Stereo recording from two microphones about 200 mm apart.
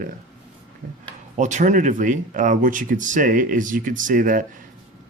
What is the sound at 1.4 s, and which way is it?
Speech, 35° right (ahead or behind).